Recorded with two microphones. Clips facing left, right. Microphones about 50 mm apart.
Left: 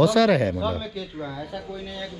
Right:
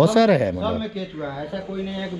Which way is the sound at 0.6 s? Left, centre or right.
Centre.